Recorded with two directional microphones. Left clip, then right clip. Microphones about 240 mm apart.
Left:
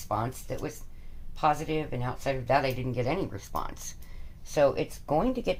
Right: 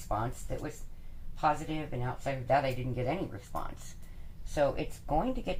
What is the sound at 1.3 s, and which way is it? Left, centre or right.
Speech, left.